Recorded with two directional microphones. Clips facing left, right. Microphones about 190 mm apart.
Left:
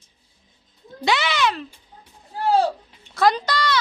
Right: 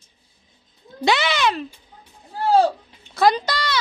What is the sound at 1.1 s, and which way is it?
Speech, 25° right (ahead or behind).